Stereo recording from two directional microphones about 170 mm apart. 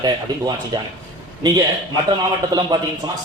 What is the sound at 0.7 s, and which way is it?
Speech, 20° right (ahead or behind).